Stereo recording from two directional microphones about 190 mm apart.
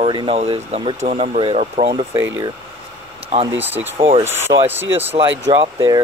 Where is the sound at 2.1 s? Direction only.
10° right (ahead or behind).